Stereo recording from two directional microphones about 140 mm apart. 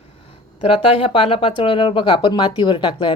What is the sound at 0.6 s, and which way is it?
Speech, 40° left (ahead or behind).